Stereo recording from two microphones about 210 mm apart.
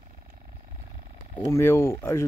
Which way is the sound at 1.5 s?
10° left (ahead or behind).